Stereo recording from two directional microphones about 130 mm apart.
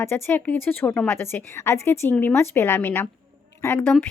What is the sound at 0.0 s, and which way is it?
Speech, 15° left (ahead or behind).